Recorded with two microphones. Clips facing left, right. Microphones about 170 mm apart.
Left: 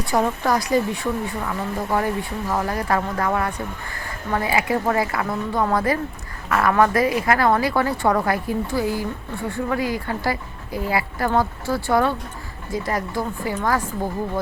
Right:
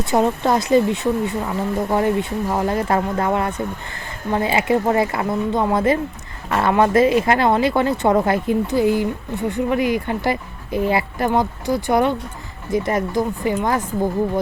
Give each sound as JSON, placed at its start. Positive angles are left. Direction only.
{"t": 0.0, "sound": "speech", "side_deg": -25}